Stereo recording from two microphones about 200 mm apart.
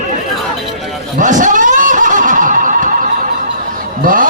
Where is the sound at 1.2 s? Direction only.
40° right (ahead or behind).